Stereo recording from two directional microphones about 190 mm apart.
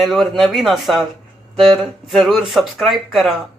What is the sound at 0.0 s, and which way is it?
Speech, centre (ahead or behind).